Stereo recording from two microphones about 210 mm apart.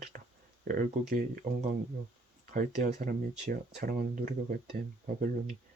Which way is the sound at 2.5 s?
35° right (ahead or behind).